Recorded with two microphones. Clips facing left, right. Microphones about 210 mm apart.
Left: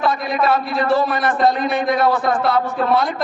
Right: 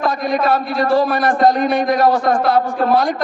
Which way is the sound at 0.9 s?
45° right (ahead or behind).